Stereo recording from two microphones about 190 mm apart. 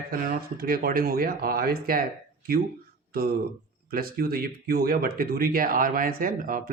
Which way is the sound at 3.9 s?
50° right (ahead or behind).